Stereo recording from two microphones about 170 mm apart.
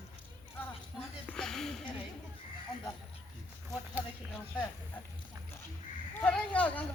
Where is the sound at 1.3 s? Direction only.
5° left (ahead or behind).